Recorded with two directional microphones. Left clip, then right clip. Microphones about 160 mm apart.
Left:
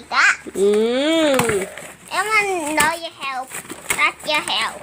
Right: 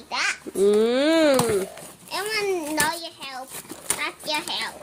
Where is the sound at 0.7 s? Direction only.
20° right (ahead or behind).